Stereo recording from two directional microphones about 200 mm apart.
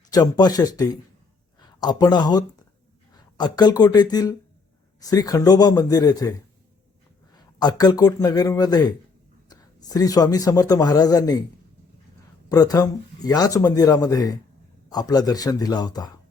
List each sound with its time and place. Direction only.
0.1 s a man's voice: 20° left (ahead or behind)
7.3 s a man's voice: 20° left (ahead or behind)
12.5 s a man's voice: 20° left (ahead or behind)